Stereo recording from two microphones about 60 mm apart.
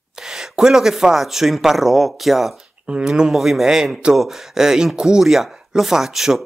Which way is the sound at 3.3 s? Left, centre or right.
Centre.